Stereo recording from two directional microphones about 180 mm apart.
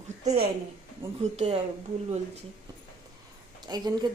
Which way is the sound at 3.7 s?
25° right (ahead or behind).